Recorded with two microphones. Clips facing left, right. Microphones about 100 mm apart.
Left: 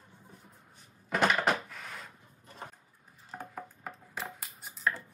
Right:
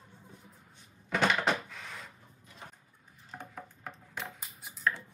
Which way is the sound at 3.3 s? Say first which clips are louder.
Left 3 dB; 5° left (ahead or behind).